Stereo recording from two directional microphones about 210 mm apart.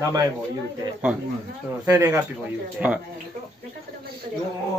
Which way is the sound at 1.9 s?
15° right (ahead or behind).